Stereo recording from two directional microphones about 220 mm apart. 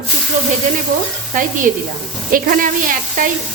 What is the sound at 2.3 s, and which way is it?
Speech, 40° right (ahead or behind).